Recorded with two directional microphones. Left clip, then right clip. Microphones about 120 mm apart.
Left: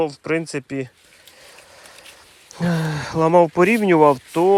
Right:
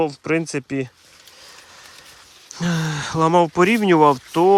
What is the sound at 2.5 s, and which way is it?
Speech, centre (ahead or behind).